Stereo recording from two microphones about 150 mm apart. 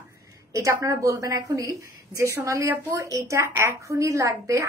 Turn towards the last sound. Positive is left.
turn(degrees=-20)  # may be behind; listen again after turning